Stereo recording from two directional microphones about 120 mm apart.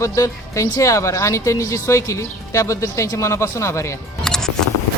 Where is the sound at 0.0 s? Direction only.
25° left (ahead or behind).